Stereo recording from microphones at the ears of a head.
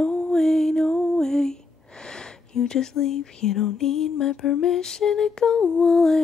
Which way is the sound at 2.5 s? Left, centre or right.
Left.